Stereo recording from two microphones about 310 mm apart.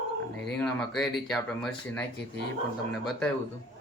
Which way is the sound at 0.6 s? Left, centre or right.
Centre.